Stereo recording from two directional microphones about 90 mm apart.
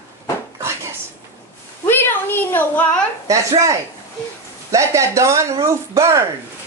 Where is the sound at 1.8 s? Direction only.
25° left (ahead or behind).